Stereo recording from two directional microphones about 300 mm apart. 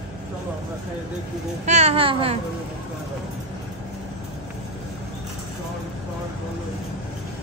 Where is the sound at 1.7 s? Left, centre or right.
Right.